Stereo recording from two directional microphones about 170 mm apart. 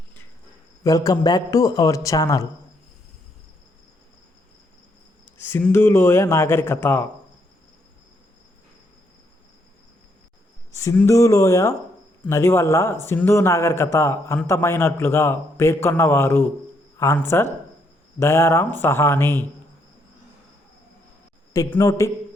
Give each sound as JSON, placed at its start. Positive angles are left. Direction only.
{"t": 0.9, "sound": "a man's voice", "side_deg": 20}
{"t": 5.2, "sound": "a man's voice", "side_deg": 10}
{"t": 10.8, "sound": "a man's voice", "side_deg": 15}
{"t": 21.5, "sound": "a man's voice", "side_deg": 15}